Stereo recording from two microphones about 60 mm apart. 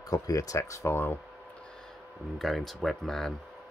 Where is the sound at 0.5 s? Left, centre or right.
Left.